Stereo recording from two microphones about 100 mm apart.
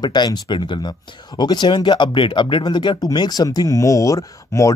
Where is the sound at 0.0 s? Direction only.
45° left (ahead or behind).